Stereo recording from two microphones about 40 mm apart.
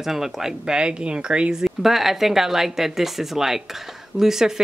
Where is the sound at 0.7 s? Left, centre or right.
Right.